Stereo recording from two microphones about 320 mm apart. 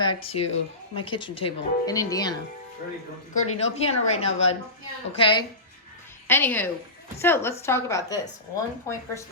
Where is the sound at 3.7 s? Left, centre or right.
Centre.